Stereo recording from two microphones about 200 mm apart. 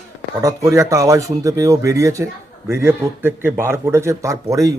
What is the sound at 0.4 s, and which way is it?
Speech, 15° right (ahead or behind).